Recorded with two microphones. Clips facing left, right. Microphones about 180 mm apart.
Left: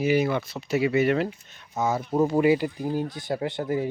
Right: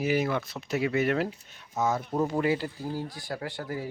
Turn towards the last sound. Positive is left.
turn(degrees=20)  # may be behind; listen again after turning